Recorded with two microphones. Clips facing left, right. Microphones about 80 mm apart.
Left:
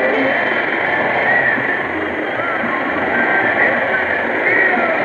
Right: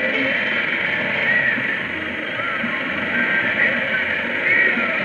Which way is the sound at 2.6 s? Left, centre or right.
Left.